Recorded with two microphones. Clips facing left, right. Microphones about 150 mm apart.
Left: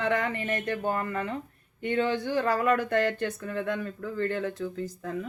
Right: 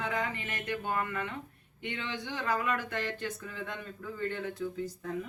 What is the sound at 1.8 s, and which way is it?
Speech, 45° left (ahead or behind).